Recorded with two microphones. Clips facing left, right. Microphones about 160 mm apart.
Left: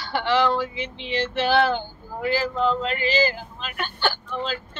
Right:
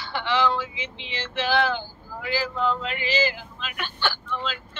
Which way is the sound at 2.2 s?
40° left (ahead or behind).